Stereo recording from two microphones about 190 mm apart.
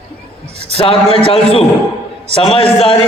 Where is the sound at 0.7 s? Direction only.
30° left (ahead or behind).